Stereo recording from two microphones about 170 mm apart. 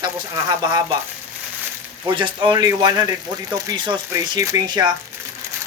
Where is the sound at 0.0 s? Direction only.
25° right (ahead or behind).